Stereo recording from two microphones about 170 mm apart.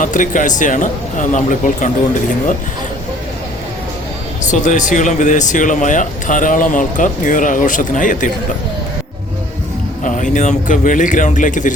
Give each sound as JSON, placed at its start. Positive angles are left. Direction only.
{"t": 0.0, "sound": "speech", "side_deg": 50}
{"t": 4.6, "sound": "speech", "side_deg": 50}
{"t": 10.0, "sound": "speech", "side_deg": 50}